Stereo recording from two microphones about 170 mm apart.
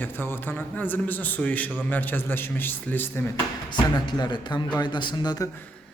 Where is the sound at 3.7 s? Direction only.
25° left (ahead or behind).